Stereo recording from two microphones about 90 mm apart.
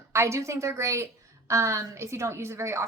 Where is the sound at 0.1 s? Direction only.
30° right (ahead or behind).